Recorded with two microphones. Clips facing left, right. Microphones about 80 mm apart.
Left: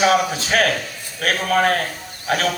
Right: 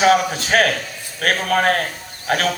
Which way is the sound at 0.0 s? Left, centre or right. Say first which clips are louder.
Right 2 dB; right.